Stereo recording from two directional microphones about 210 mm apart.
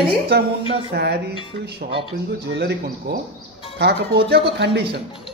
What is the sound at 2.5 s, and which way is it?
Speech, 50° right (ahead or behind).